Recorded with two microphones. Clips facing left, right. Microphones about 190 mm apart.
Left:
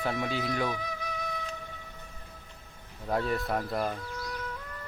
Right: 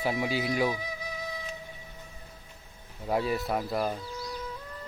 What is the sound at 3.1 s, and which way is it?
Speech, 5° right (ahead or behind).